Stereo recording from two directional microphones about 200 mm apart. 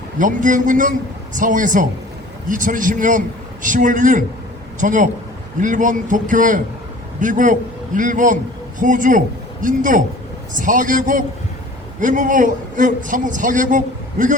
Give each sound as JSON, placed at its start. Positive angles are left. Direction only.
{"t": 0.2, "sound": "a man's voice", "side_deg": -40}